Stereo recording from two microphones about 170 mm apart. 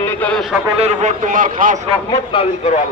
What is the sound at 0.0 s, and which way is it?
Speech, 5° left (ahead or behind).